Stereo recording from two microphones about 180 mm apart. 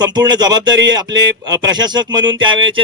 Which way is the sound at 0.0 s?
25° right (ahead or behind).